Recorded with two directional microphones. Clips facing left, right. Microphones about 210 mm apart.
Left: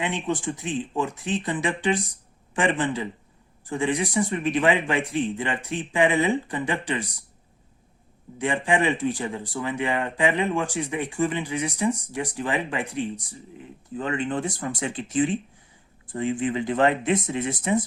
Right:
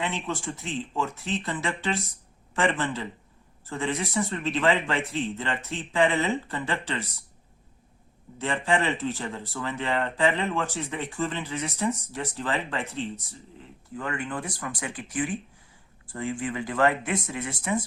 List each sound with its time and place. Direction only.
0.0 s speech: 15° left (ahead or behind)
8.4 s speech: 15° left (ahead or behind)